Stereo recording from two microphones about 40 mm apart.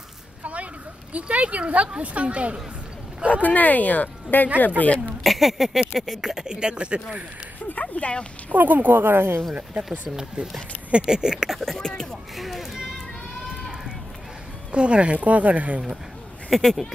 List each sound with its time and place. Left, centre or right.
0.4 s a sound: right
1.3 s speech: right
3.4 s speech: left
5.2 s speech: centre; by 7.0 s right
7.9 s speech: left
8.5 s speech: right
10.9 s speech: right
11.6 s speech: centre
12.4 s speech: centre
14.7 s speech: right
16.4 s speech: centre